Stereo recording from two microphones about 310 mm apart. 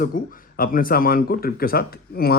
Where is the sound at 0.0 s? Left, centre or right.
Left.